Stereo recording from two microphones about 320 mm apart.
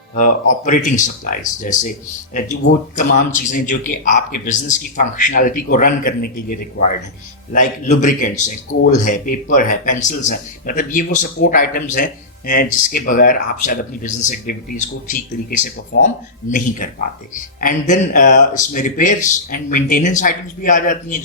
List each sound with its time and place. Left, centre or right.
0.1 s speech: left
7.5 s speech: left